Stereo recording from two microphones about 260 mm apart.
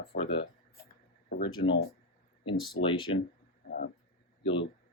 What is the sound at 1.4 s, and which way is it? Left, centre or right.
Speech, centre.